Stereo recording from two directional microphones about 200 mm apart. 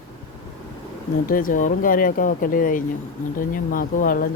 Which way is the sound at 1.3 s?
45° left (ahead or behind).